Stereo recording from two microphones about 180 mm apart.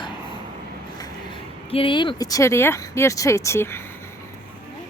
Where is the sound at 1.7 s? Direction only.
30° left (ahead or behind).